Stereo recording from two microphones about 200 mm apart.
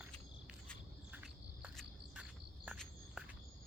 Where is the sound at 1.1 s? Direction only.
5° right (ahead or behind).